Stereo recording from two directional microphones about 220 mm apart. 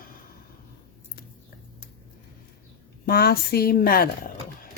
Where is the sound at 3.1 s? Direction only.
45° left (ahead or behind).